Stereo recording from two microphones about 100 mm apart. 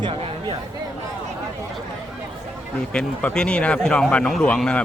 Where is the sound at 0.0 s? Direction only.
60° right (ahead or behind).